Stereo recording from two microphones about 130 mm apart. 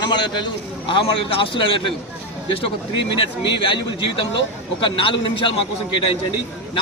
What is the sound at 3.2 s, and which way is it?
A man's voice, 40° left (ahead or behind).